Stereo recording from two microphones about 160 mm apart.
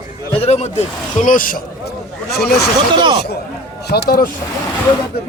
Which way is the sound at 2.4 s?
85° left.